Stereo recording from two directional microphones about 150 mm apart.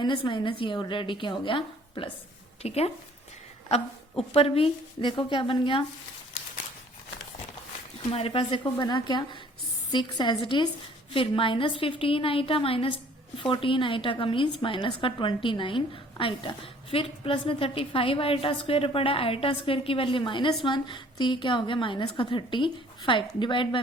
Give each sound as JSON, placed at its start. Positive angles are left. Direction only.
{"t": 0.0, "sound": "a woman's voice", "side_deg": 30}
{"t": 4.4, "sound": "a woman's voice", "side_deg": 40}
{"t": 8.1, "sound": "a woman's voice", "side_deg": 40}